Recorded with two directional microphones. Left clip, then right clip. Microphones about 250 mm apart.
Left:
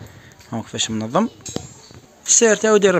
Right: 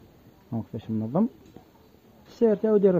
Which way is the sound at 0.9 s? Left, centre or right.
Left.